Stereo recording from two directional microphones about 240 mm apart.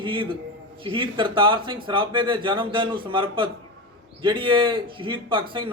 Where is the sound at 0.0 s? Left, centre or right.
Right.